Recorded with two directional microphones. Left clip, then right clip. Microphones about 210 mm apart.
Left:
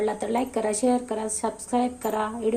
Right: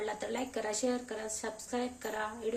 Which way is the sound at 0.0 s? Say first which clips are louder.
Left 11 dB; 15° left (ahead or behind).